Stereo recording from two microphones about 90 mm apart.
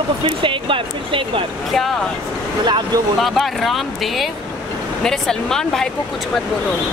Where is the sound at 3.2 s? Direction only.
Centre (ahead or behind).